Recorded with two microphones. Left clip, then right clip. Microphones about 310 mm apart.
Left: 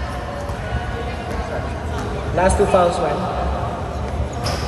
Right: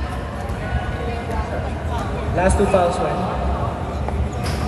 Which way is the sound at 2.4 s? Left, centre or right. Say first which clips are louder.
Left 2 dB; left.